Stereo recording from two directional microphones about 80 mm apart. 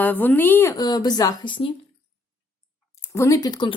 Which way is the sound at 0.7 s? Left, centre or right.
Left.